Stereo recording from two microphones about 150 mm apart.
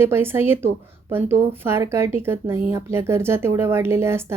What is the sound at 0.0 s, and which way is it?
Speech, 15° right (ahead or behind).